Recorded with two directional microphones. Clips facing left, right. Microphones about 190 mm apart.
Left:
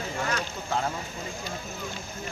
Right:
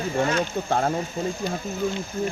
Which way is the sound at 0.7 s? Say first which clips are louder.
Right 5 dB; 50° right (ahead or behind).